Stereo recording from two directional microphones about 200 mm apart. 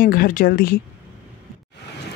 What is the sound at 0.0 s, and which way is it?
Speech, 45° left (ahead or behind).